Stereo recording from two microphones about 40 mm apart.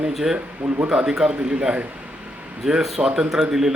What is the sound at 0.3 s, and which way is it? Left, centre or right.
Speech, right.